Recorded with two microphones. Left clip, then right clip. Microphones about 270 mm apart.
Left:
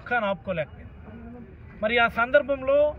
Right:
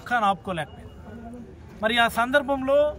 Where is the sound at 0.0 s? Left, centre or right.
Centre.